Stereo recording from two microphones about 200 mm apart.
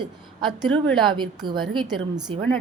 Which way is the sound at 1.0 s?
25° right (ahead or behind).